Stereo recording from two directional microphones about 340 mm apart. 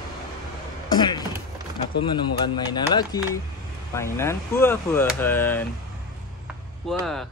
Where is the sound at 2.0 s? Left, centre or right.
Centre.